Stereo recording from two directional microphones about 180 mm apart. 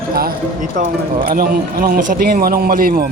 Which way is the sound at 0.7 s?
45° right (ahead or behind).